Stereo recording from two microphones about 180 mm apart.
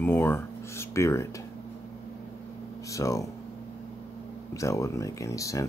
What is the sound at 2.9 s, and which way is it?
Speech, 20° left (ahead or behind).